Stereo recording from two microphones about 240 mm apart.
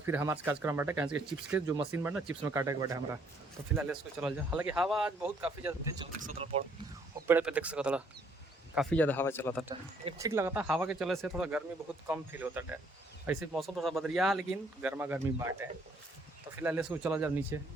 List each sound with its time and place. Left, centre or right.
0.0 s speech: centre
6.1 s speech: right
7.3 s speech: centre
10.0 s speech: centre
16.6 s speech: centre